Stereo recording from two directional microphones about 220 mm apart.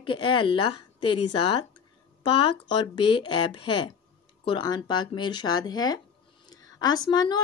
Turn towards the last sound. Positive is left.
turn(degrees=20)  # may be behind; listen again after turning